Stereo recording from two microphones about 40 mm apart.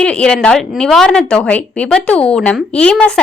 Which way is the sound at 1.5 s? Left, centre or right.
Left.